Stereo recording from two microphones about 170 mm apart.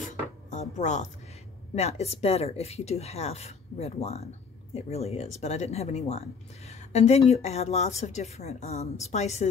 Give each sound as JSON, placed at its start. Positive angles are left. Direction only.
{"t": 0.5, "sound": "music", "side_deg": 45}
{"t": 1.8, "sound": "a woman's voice", "side_deg": 40}